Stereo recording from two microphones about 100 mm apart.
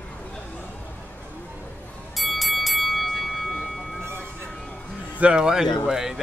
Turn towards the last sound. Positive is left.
turn(degrees=-5)  # may be behind; listen again after turning